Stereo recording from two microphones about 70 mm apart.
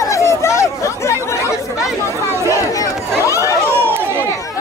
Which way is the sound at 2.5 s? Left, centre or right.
Left.